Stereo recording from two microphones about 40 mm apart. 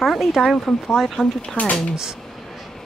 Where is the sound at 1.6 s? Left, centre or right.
Left.